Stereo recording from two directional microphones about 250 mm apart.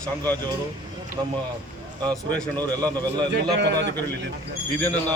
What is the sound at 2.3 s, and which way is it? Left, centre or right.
Speech, centre.